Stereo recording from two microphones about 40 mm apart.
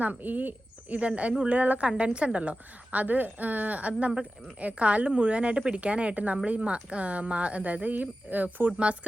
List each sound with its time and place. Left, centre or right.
0.0 s speech: right
0.9 s a woman's voice: right